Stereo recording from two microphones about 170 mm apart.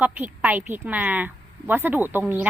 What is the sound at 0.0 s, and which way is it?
Speech, 10° right (ahead or behind).